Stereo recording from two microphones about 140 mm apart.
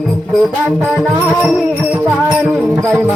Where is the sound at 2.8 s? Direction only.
15° right (ahead or behind).